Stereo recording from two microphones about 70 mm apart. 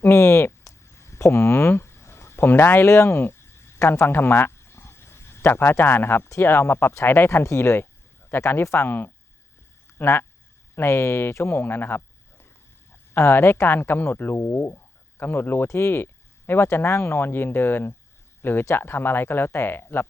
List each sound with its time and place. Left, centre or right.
0.0 s a sound: left
3.8 s speech: left
8.9 s speech: left